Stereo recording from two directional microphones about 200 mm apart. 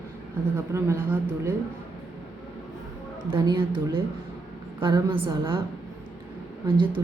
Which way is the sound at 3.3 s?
25° right (ahead or behind).